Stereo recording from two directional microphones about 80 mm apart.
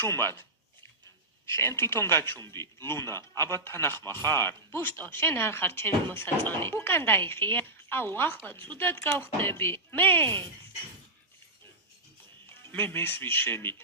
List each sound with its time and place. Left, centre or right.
0.0 s speech: left
1.5 s a man's voice: left
12.5 s speech: left